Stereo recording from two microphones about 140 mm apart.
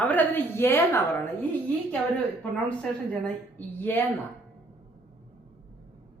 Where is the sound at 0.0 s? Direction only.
10° left (ahead or behind).